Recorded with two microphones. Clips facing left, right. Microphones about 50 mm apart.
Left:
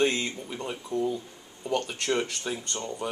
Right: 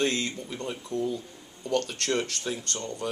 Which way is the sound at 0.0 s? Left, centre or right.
Centre.